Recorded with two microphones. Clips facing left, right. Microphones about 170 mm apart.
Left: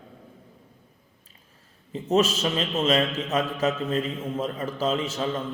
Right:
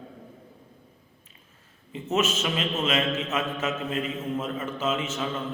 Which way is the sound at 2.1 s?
35° left (ahead or behind).